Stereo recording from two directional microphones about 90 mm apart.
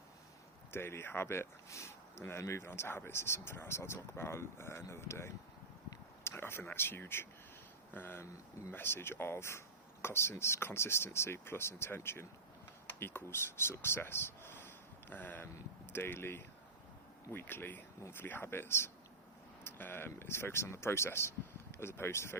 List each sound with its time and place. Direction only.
0.7 s speech: 25° left (ahead or behind)